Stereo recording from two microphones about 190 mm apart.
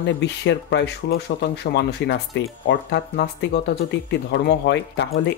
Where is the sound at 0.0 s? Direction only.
70° left (ahead or behind).